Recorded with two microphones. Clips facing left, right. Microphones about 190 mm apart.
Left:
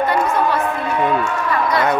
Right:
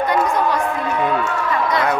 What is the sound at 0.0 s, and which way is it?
Music, 15° right (ahead or behind).